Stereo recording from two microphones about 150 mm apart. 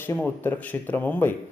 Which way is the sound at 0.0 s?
15° left (ahead or behind).